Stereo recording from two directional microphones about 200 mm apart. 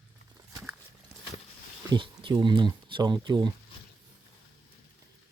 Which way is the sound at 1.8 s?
25° right (ahead or behind).